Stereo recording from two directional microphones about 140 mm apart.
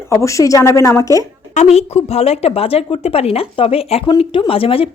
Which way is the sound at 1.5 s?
55° left (ahead or behind).